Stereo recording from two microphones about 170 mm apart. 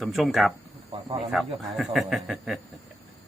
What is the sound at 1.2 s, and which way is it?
Speech, centre (ahead or behind).